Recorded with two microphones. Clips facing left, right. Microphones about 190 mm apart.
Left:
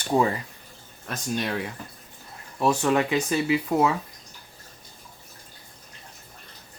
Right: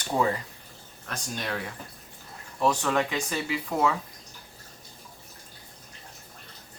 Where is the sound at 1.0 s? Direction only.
20° left (ahead or behind).